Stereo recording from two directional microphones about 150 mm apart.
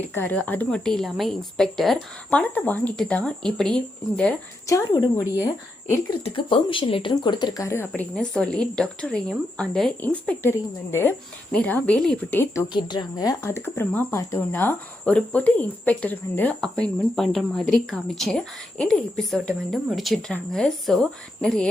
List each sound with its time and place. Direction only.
0.1 s a woman's voice: 15° left (ahead or behind)
4.6 s speech: 25° left (ahead or behind)
6.2 s speech: 35° left (ahead or behind); by 8.0 s 15° left (ahead or behind)
8.1 s a woman's voice: 5° left (ahead or behind)
11.5 s speech: 10° left (ahead or behind)
12.6 s speech: 30° left (ahead or behind); by 21.7 s 5° left (ahead or behind)